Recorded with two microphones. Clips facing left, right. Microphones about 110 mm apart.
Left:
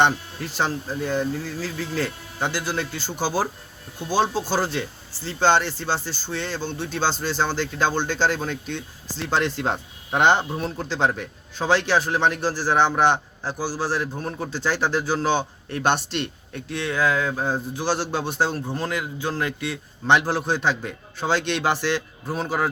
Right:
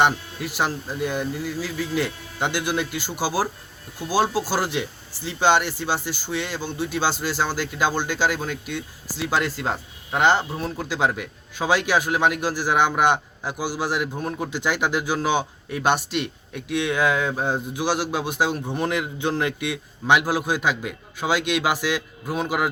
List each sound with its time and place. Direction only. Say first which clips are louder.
0.0 s a man's voice: even; 10° right (ahead or behind)
10.1 s speech: left 1 dB; 20° left (ahead or behind)
10.7 s a man's voice: right 1 dB; 5° right (ahead or behind)